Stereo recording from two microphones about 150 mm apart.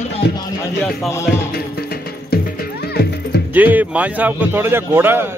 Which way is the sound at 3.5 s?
10° right (ahead or behind).